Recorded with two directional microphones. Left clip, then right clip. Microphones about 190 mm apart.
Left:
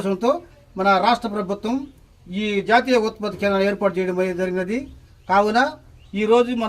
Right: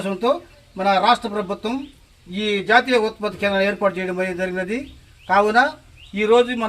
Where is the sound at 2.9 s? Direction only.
20° left (ahead or behind).